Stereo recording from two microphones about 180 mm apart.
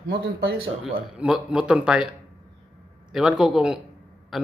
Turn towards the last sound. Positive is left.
turn(degrees=0)  # may be behind; listen again after turning